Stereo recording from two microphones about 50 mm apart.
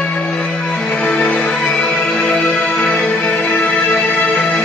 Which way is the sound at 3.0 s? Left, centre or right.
Left.